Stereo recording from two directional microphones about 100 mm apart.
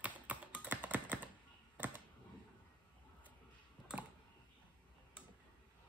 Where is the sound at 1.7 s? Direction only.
20° right (ahead or behind).